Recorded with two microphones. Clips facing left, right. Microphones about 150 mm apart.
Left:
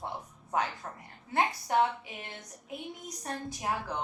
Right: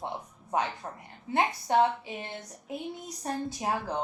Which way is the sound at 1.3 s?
25° right (ahead or behind).